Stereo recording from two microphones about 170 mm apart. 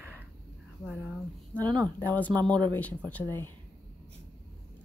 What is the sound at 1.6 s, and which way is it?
Speech, 25° right (ahead or behind).